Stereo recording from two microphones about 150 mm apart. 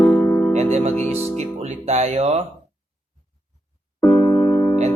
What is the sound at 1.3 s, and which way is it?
A man's voice, 45° right (ahead or behind).